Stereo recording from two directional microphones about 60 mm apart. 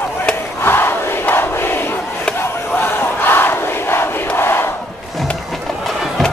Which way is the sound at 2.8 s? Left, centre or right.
Left.